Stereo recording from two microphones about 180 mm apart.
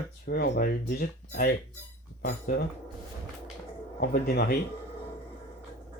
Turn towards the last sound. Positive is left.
turn(degrees=55)  # may be behind; listen again after turning